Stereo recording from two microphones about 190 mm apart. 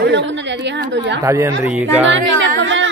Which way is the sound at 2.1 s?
80° right.